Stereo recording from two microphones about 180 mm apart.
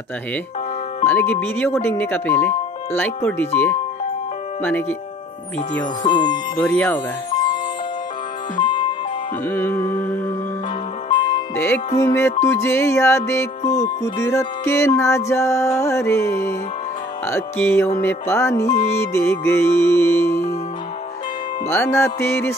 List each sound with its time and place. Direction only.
1.0 s music: 10° left (ahead or behind)
6.0 s music: 25° left (ahead or behind)
6.6 s music: 10° left (ahead or behind)
7.2 s music: 25° left (ahead or behind)
8.5 s music: 25° left (ahead or behind)
9.5 s music: 15° left (ahead or behind)
11.1 s music: 25° left (ahead or behind)
11.5 s music: 10° left (ahead or behind)
18.7 s music: 35° left (ahead or behind)
18.9 s music: 15° left (ahead or behind)
21.6 s music: 15° left (ahead or behind)